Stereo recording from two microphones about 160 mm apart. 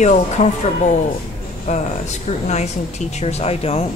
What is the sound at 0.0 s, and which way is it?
Speech, 45° left (ahead or behind).